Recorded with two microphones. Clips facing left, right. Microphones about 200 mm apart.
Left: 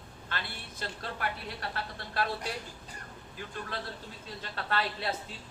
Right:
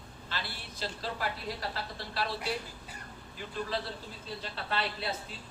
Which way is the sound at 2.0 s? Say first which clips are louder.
Left 3 dB; 50° left (ahead or behind).